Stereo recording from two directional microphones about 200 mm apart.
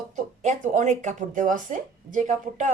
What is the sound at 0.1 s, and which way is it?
A woman's voice, 40° right (ahead or behind).